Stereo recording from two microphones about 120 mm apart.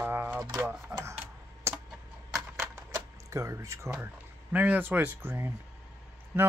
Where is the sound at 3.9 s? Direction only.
15° right (ahead or behind).